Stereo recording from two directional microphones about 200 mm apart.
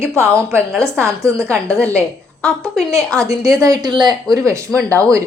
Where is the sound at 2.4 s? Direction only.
Centre (ahead or behind).